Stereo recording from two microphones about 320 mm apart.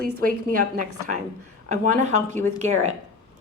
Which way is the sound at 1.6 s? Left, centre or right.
Right.